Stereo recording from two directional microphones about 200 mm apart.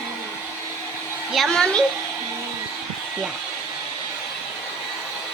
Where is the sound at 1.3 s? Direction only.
Centre (ahead or behind).